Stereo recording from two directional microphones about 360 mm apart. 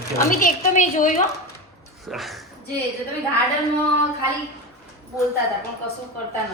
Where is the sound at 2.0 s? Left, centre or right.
Centre.